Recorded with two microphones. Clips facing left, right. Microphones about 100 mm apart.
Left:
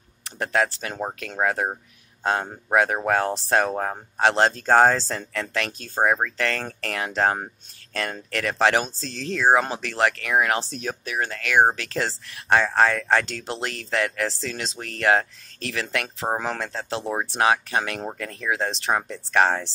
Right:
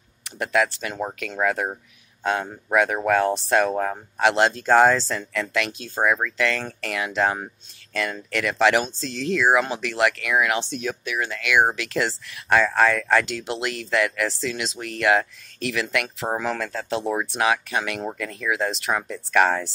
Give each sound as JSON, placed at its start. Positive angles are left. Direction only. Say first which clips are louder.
{"t": 0.2, "sound": "speech", "louder": "right 1 dB", "side_deg": 35}